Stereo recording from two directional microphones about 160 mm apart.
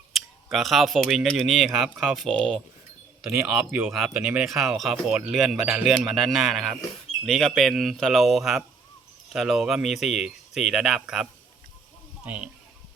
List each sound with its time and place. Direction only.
0.1 s scissors: centre (ahead or behind)
0.5 s speech: centre (ahead or behind)